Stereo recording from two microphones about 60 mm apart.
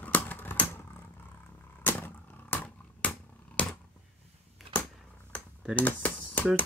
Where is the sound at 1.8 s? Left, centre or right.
Left.